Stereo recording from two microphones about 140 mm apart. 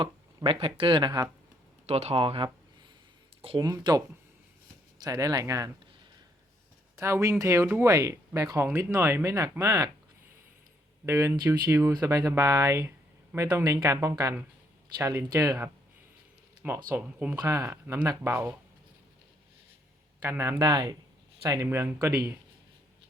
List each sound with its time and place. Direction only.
0.4 s speech: 40° right (ahead or behind)
1.9 s speech: 45° right (ahead or behind)
3.7 s speech: 25° right (ahead or behind)
6.9 s speech: 20° right (ahead or behind)
11.0 s speech: 20° right (ahead or behind)
16.9 s speech: 10° right (ahead or behind)
17.3 s speech: 25° right (ahead or behind)
20.2 s speech: 15° right (ahead or behind)
21.4 s speech: 20° right (ahead or behind)